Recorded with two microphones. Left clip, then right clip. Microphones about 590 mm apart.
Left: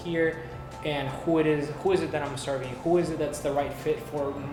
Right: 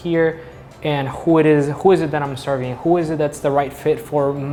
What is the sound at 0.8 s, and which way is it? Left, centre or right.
Speech, right.